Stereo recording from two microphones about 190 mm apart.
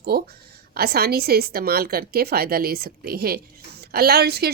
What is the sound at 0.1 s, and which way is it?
A woman's voice, 55° right (ahead or behind).